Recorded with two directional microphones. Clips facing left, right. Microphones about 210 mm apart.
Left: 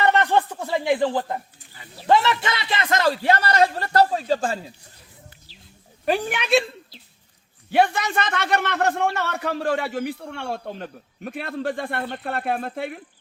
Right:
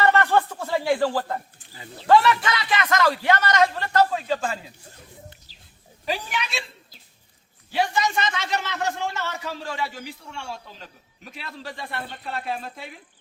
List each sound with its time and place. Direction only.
0.0 s a man's voice: 20° left (ahead or behind); by 4.6 s 40° left (ahead or behind)
6.1 s a man's voice: 55° left (ahead or behind)
7.7 s a man's voice: 60° left (ahead or behind)